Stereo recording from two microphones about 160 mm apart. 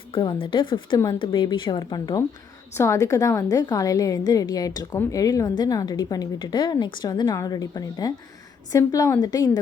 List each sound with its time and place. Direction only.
0.1 s a woman's voice: 35° left (ahead or behind)
2.7 s a woman's voice: 15° left (ahead or behind)